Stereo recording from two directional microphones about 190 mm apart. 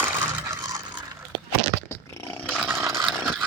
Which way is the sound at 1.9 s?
15° left (ahead or behind).